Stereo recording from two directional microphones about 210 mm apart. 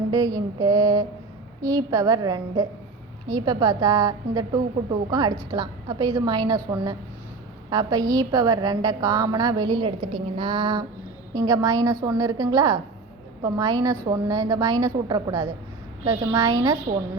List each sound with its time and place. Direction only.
0.1 s a woman's voice: 15° right (ahead or behind)